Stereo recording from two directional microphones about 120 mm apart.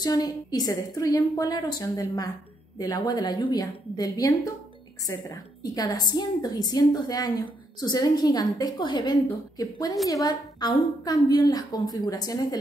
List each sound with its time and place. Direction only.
0.0 s a woman's voice: 35° left (ahead or behind)